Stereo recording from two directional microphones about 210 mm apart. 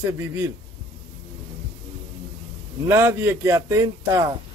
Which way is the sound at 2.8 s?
10° right (ahead or behind).